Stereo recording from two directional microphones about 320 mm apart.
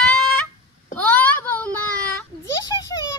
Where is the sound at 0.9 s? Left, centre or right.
Centre.